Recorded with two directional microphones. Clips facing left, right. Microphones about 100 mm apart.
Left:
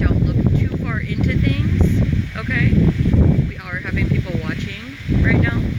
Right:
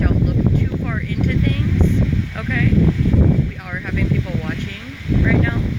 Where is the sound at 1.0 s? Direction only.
40° right (ahead or behind).